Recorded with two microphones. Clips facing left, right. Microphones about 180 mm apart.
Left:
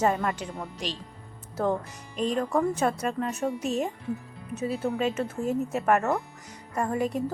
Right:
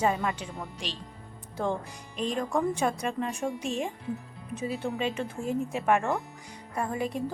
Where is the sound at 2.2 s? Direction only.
35° left (ahead or behind).